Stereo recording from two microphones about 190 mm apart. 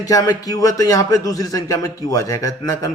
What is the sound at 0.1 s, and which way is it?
A man's voice, 20° left (ahead or behind).